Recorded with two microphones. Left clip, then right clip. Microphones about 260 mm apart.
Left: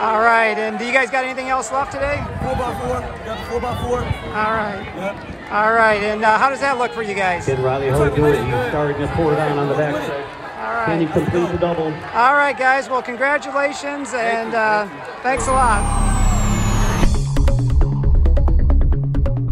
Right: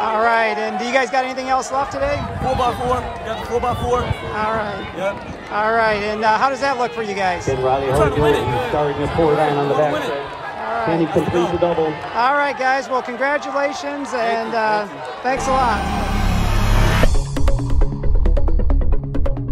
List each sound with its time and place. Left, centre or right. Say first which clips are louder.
0.0 s a man's voice: left 2 dB; centre
3.6 s speech: right 4 dB; centre
7.4 s a man's voice: right 1 dB; right
8.4 s a man's voice: even; centre
8.7 s a man's voice: right 1 dB; right
11.0 s a man's voice: right 1 dB; right
12.2 s speech: left 3 dB; centre